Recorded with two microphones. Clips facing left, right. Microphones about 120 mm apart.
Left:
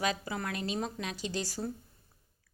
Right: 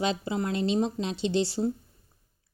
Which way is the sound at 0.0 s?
25° right (ahead or behind).